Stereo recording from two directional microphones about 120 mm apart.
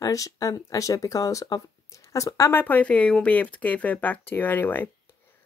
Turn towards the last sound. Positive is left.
turn(degrees=15)  # may be behind; listen again after turning